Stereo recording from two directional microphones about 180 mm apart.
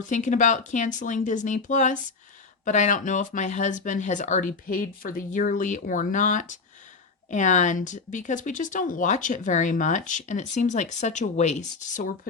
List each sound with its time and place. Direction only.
0.1 s speech: 45° left (ahead or behind)